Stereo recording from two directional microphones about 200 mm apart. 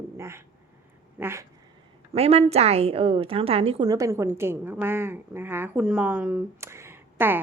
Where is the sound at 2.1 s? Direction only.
30° right (ahead or behind).